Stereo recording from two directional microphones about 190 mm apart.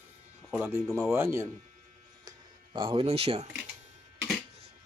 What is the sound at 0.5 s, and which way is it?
Speech, 10° right (ahead or behind).